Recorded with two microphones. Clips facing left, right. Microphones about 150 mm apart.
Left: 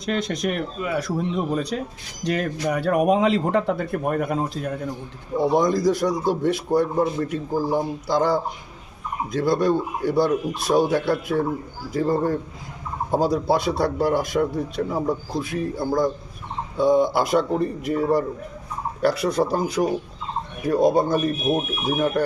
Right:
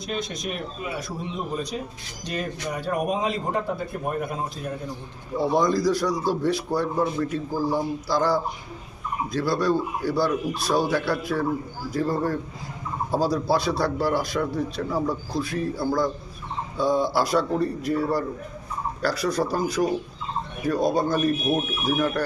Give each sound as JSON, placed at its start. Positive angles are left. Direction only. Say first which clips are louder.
{"t": 0.0, "sound": "a man's voice", "louder": "left 6 dB", "side_deg": 65}
{"t": 5.4, "sound": "a man's voice", "louder": "left 2 dB", "side_deg": 20}